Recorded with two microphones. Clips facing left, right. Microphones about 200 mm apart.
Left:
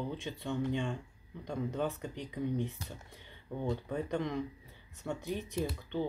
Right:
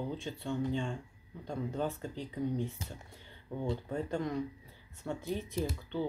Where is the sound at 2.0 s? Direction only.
15° left (ahead or behind).